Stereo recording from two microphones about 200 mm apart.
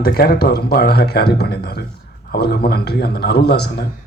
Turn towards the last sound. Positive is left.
turn(degrees=55)  # may be behind; listen again after turning